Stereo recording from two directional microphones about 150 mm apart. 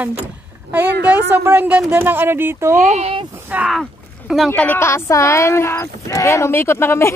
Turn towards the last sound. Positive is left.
turn(degrees=15)  # may be behind; listen again after turning